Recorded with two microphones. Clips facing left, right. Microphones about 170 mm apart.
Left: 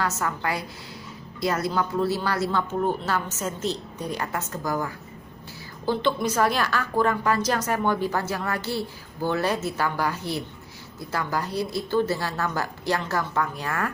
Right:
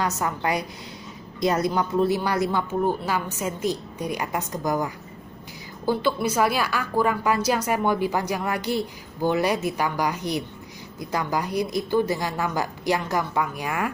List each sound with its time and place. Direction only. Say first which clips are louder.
0.0 s a woman's voice: right 2 dB; 20° right (ahead or behind)